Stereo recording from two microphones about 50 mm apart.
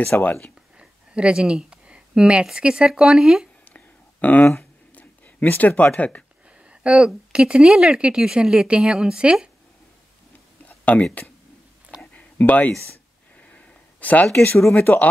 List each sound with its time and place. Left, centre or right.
0.0 s speech: left
0.7 s a sound: centre
2.4 s speech: centre
3.7 s a sound: left
5.6 s speech: left
6.6 s speech: right
10.9 s speech: left
12.2 s a sound: left
14.8 s speech: left